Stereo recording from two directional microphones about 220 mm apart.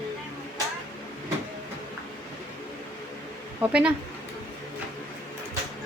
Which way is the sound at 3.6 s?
5° right (ahead or behind).